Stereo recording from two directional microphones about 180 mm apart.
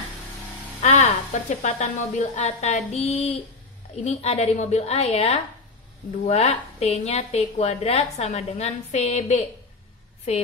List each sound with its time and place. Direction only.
0.8 s a woman's voice: 40° left (ahead or behind)